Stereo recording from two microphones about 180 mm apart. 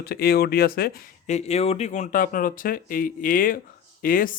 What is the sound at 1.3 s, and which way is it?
A man's voice, 35° left (ahead or behind).